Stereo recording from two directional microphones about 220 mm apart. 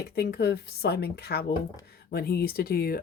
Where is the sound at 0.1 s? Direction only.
45° left (ahead or behind).